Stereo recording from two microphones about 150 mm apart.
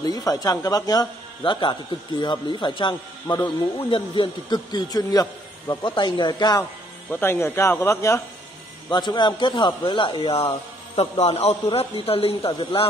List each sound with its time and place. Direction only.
0.0 s a man's voice: 25° left (ahead or behind)
7.1 s a man's voice: 15° left (ahead or behind)
8.9 s a man's voice: 30° left (ahead or behind)